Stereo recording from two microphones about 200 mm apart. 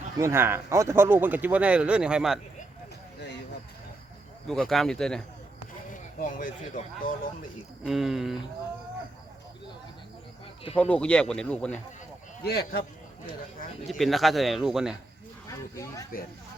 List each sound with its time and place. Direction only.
0.2 s a man's voice: 10° right (ahead or behind)
4.4 s speech: centre (ahead or behind)
5.9 s speech: 40° left (ahead or behind)
7.9 s speech: centre (ahead or behind)
10.8 s speech: 5° left (ahead or behind)
12.4 s a man's voice: 50° left (ahead or behind)
14.0 s speech: centre (ahead or behind)
15.4 s speech: 15° left (ahead or behind)